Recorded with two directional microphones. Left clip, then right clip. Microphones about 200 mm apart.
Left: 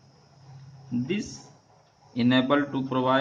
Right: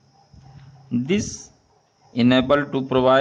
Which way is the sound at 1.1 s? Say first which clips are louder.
Right 8 dB; 50° right (ahead or behind).